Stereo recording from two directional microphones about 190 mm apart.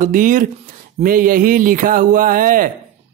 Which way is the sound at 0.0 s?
45° right (ahead or behind).